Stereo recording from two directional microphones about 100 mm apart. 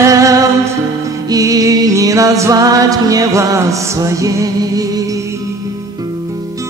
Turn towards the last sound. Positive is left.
turn(degrees=-35)  # may be behind; listen again after turning